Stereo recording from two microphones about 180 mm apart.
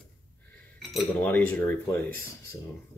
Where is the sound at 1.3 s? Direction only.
10° left (ahead or behind).